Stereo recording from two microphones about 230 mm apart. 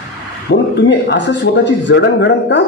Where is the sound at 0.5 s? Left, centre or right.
Left.